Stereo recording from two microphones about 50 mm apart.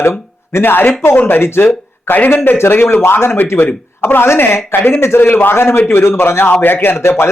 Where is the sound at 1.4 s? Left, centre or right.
Left.